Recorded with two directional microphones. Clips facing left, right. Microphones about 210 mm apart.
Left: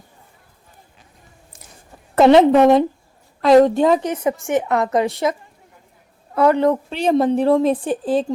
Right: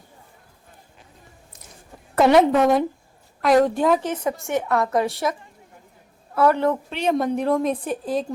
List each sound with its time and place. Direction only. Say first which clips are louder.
2.1 s a woman's voice: left 5 dB; 25° left (ahead or behind)
6.3 s a woman's voice: left 4 dB; 15° left (ahead or behind)
6.9 s a woman's voice: left 5 dB; 30° left (ahead or behind)